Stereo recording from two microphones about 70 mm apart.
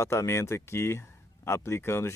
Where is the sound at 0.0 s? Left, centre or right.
Left.